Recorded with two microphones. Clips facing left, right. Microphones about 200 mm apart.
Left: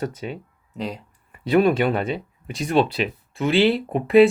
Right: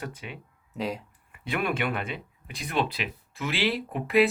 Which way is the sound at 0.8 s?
5° right (ahead or behind).